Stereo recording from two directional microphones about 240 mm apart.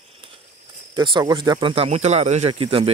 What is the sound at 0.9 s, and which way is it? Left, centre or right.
Speech, centre.